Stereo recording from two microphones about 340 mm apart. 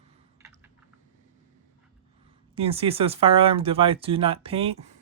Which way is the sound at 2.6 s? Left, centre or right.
Centre.